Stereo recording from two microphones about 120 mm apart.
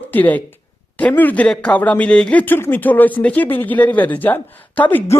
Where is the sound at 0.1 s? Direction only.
15° left (ahead or behind).